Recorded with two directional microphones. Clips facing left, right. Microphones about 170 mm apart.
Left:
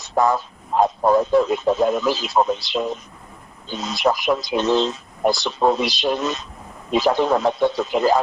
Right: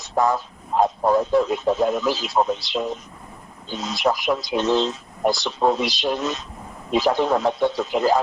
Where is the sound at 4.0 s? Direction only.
85° left.